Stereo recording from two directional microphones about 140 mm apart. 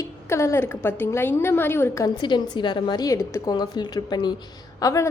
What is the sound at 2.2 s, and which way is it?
A woman's voice, 35° left (ahead or behind).